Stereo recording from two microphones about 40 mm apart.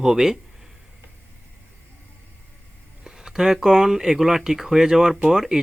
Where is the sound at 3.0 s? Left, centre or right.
Centre.